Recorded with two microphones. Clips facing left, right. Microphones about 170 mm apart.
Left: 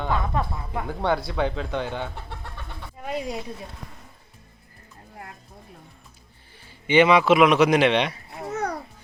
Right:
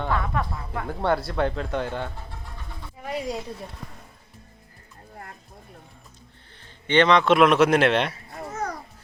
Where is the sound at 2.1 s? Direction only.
70° left (ahead or behind).